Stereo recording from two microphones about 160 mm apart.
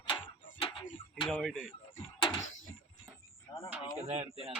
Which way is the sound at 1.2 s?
Centre (ahead or behind).